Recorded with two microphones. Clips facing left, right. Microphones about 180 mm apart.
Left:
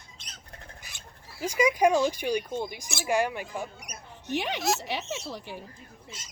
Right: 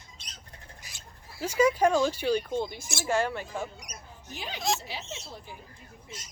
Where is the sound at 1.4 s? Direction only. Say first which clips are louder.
Even; 15° left (ahead or behind).